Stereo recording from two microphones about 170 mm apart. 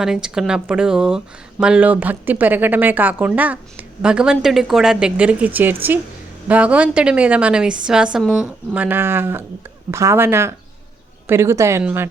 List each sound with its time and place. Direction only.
0.0 s speech: 5° right (ahead or behind)
11.8 s speech: 5° right (ahead or behind)